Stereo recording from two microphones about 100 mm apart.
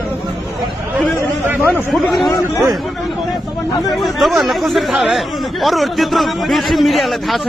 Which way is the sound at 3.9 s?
Centre (ahead or behind).